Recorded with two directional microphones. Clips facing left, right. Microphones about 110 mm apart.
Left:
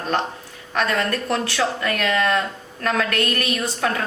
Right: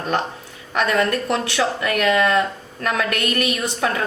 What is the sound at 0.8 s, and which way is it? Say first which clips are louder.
A woman's voice: right 3 dB; 20° right (ahead or behind).